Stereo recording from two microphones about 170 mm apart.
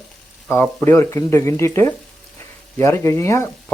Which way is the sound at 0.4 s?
15° left (ahead or behind).